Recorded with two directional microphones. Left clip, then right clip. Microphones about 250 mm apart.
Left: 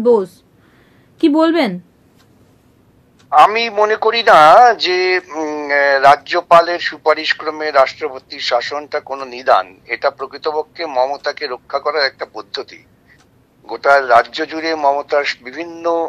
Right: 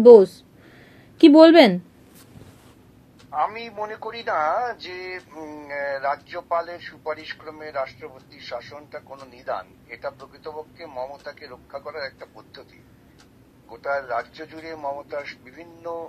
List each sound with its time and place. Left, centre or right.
0.0 s speech: centre
3.3 s speech: left